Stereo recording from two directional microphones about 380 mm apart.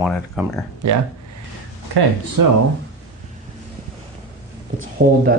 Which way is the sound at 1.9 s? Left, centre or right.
Right.